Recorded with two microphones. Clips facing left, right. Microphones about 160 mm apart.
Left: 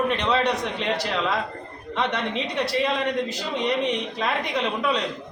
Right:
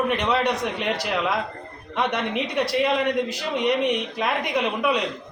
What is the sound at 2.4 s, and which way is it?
A man's voice, 10° right (ahead or behind).